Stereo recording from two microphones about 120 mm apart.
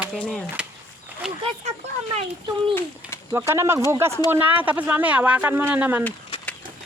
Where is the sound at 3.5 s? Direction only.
20° right (ahead or behind).